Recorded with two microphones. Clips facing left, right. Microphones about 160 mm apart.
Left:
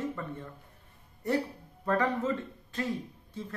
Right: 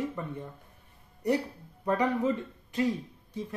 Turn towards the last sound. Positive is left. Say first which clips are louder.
# right 3 dB
turn(degrees=-15)  # may be behind; listen again after turning